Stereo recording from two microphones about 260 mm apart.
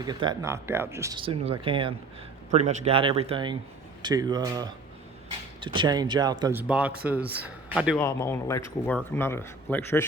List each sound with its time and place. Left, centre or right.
0.0 s a man's voice: centre